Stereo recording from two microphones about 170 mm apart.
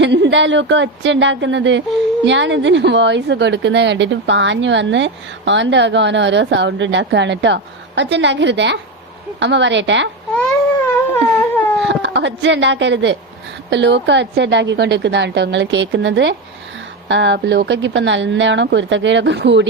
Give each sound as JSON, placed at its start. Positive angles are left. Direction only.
{"t": 0.0, "sound": "speech", "side_deg": -90}
{"t": 11.1, "sound": "a sound", "side_deg": 10}
{"t": 11.9, "sound": "speech", "side_deg": -90}